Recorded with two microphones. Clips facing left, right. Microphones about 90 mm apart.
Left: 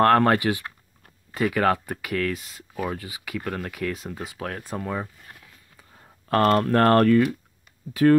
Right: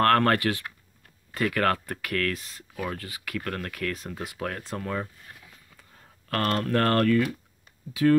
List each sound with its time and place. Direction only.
0.0 s speech: 15° left (ahead or behind)
4.6 s speech: 10° left (ahead or behind)
6.2 s speech: 30° left (ahead or behind)
7.9 s speech: 45° left (ahead or behind)